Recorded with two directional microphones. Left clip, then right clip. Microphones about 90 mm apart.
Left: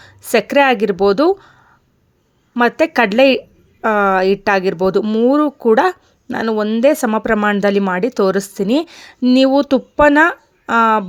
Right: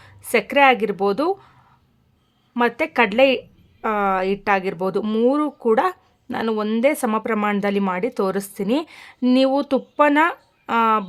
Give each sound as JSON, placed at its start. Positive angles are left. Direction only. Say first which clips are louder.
{"t": 0.0, "sound": "speech", "louder": "left 5 dB", "side_deg": 50}
{"t": 2.6, "sound": "a woman's voice", "louder": "left 5 dB", "side_deg": 50}
{"t": 5.0, "sound": "speech", "louder": "left 4 dB", "side_deg": 30}
{"t": 5.3, "sound": "speech", "louder": "left 6 dB", "side_deg": 50}